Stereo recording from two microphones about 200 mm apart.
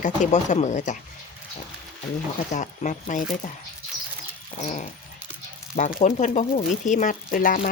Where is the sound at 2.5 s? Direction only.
40° left (ahead or behind).